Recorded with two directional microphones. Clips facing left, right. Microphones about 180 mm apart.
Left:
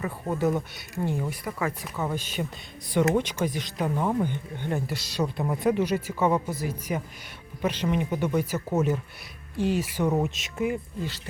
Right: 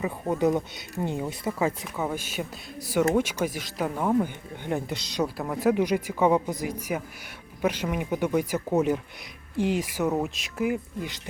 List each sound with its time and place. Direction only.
0.0 s speech: 20° right (ahead or behind)
2.0 s speech: 10° right (ahead or behind)
4.3 s speech: 15° right (ahead or behind)
5.4 s speech: 5° left (ahead or behind)
5.6 s speech: 15° right (ahead or behind)